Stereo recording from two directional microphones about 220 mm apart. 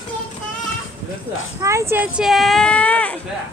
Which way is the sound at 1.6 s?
15° right (ahead or behind).